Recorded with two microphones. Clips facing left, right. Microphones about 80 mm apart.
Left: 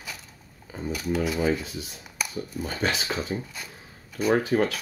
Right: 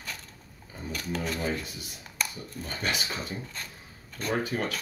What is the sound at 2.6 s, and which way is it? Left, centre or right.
Speech, centre.